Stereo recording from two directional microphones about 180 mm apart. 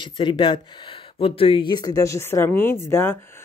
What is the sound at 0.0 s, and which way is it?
Speech, 30° left (ahead or behind).